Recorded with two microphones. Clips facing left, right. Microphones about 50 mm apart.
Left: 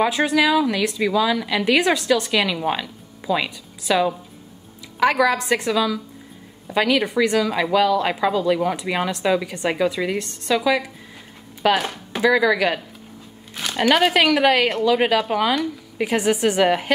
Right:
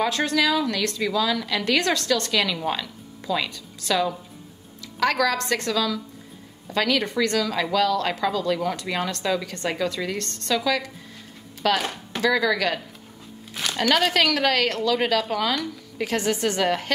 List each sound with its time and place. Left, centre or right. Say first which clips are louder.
0.0 s a woman's voice: left 4 dB; centre
11.8 s a woman's voice: left 4 dB; centre